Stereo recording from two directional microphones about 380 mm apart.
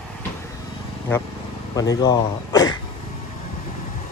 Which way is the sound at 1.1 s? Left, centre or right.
Centre.